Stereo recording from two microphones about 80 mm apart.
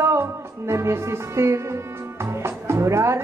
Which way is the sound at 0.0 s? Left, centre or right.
Right.